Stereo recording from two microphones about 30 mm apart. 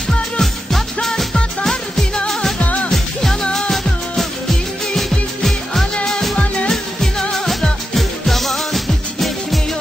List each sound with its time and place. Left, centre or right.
0.4 s music: centre
2.6 s music: left
2.9 s music: centre
7.2 s music: left
7.9 s music: centre